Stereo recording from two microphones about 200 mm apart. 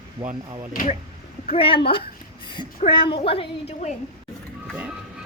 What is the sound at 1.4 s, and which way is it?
A woman's voice, 30° left (ahead or behind).